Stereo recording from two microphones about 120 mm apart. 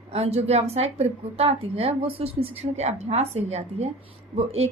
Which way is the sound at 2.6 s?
65° right (ahead or behind).